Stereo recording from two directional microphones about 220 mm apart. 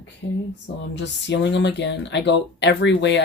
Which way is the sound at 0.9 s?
50° left (ahead or behind).